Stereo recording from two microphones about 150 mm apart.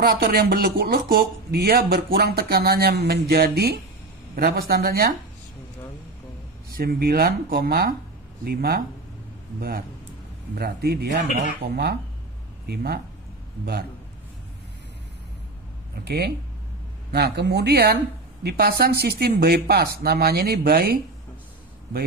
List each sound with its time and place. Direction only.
0.2 s speech: 85° right
6.8 s speech: 90° right
10.5 s speech: 90° right
16.0 s speech: 90° right